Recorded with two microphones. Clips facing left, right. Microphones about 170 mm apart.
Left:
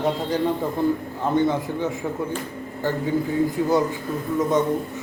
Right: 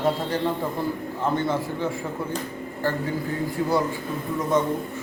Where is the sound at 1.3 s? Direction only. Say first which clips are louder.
Left 4 dB; 20° left (ahead or behind).